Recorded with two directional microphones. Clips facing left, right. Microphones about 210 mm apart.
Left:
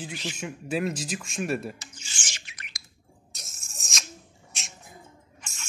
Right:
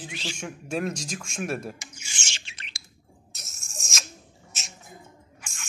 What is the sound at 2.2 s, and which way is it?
Bird, 25° right (ahead or behind).